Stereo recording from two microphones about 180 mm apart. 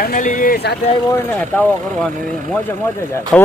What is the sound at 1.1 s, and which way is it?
Speech, 10° left (ahead or behind).